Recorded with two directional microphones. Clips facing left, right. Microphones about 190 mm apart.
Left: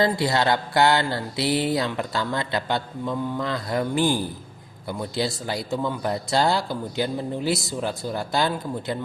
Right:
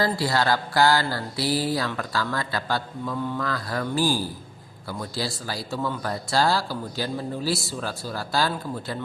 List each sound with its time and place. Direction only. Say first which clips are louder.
0.0 s mantra: left 2 dB; 20° left (ahead or behind)